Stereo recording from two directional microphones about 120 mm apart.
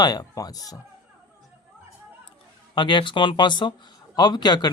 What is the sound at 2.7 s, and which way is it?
Speech, 40° left (ahead or behind).